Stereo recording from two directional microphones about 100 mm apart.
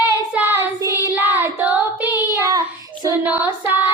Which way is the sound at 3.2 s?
15° right (ahead or behind).